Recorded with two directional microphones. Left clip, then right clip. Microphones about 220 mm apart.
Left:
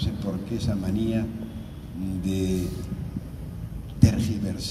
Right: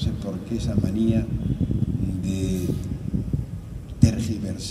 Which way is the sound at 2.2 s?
15° right (ahead or behind).